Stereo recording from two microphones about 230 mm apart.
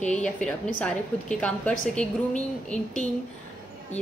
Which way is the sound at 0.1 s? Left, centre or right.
Centre.